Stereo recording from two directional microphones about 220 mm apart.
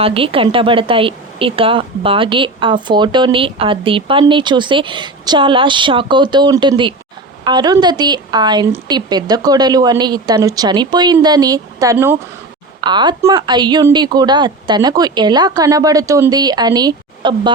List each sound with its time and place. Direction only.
0.0 s speech: 25° right (ahead or behind)